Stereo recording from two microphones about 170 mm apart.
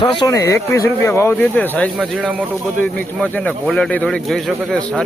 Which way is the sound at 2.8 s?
10° left (ahead or behind).